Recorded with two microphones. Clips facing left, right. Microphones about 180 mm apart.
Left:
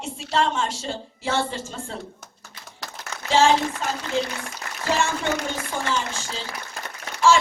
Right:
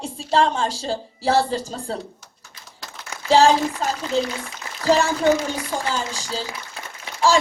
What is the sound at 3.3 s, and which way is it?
A woman's voice, 35° right (ahead or behind).